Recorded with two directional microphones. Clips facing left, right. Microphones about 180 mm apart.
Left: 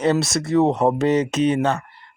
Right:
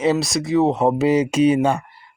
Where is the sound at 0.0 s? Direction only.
Centre (ahead or behind).